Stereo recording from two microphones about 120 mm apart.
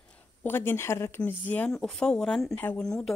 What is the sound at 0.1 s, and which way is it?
Speech, 15° left (ahead or behind).